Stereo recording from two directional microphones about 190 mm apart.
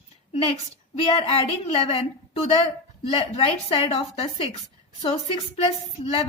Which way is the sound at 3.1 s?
30° left (ahead or behind).